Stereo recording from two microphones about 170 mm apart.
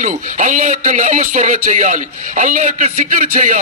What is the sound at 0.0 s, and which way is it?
A man's voice, 50° right (ahead or behind).